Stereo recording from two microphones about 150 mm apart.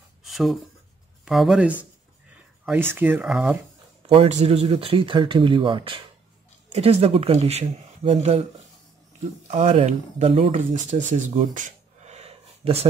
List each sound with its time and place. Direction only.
0.2 s a sound: centre (ahead or behind)
1.2 s speech: centre (ahead or behind)
4.1 s speech: 45° right (ahead or behind)
9.5 s speech: 50° right (ahead or behind)
10.7 s speech: 55° right (ahead or behind)